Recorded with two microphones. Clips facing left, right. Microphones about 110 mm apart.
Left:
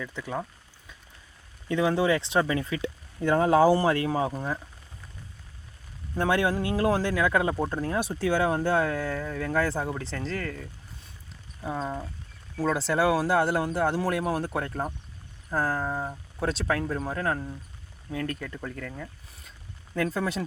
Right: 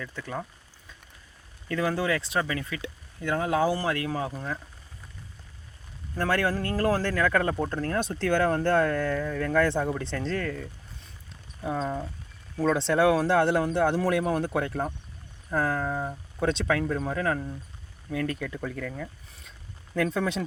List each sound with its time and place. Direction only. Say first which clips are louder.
0.2 s speech: left 2 dB; 5° left (ahead or behind)
1.6 s speech: left 3 dB; 20° left (ahead or behind)
6.1 s speech: left 1 dB; 15° left (ahead or behind)
11.8 s speech: right 2 dB; 5° left (ahead or behind)